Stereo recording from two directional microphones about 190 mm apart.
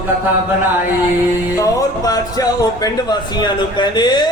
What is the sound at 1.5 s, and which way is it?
Speech, 20° left (ahead or behind).